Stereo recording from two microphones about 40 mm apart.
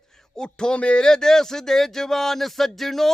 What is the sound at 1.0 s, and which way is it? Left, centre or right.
Speech, centre.